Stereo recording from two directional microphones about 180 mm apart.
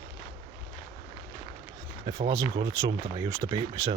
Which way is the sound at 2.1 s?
25° right (ahead or behind).